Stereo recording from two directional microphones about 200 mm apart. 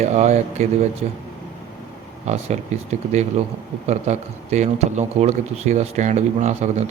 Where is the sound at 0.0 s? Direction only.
35° right (ahead or behind).